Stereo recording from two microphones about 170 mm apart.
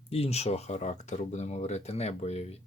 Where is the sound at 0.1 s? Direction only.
35° left (ahead or behind).